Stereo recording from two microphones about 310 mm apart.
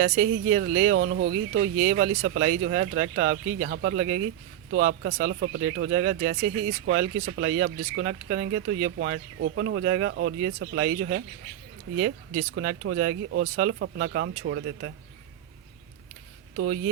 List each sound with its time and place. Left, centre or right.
0.0 s speech: right
16.6 s speech: right